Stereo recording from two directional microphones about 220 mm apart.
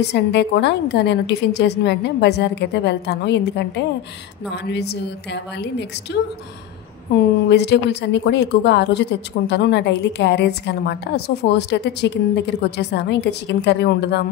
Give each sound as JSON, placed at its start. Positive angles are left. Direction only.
{"t": 0.0, "sound": "a woman's voice", "side_deg": 50}
{"t": 7.4, "sound": "a woman's voice", "side_deg": 50}